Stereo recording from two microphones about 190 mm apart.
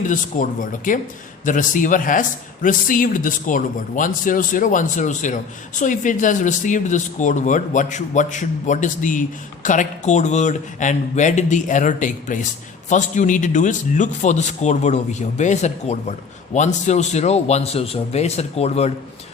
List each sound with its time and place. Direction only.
0.3 s a man's voice: 40° left (ahead or behind)